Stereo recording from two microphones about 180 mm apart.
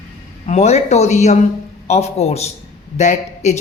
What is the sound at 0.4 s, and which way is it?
Speech, 40° left (ahead or behind).